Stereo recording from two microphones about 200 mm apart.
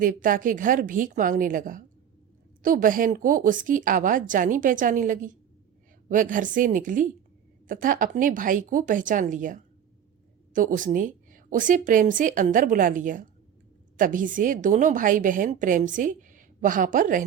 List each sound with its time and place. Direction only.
0.0 s a woman's voice: 40° right (ahead or behind)